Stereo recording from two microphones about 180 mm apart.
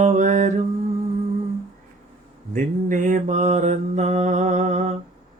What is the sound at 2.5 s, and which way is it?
Mantra, 45° right (ahead or behind).